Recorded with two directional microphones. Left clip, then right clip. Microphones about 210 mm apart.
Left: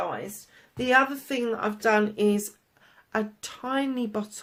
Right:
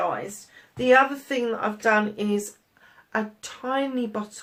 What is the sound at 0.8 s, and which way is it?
Speech, 45° left (ahead or behind).